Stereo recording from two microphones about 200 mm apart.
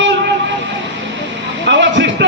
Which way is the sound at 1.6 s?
65° right (ahead or behind).